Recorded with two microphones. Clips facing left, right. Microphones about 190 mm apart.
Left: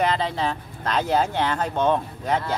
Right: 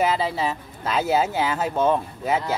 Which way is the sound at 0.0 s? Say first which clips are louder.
Right 1 dB; 5° right (ahead or behind).